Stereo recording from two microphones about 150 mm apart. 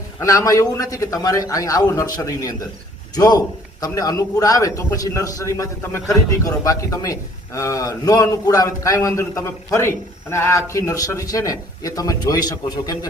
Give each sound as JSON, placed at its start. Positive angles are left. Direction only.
{"t": 0.2, "sound": "a man's voice", "side_deg": 20}